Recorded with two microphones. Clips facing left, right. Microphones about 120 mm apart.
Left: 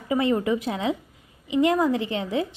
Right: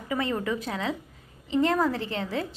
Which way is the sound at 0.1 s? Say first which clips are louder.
Left 6 dB; 25° left (ahead or behind).